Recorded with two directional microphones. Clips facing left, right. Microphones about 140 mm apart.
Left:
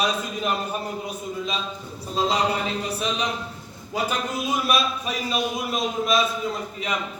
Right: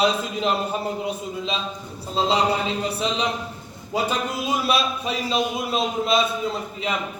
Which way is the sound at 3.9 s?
25° right (ahead or behind).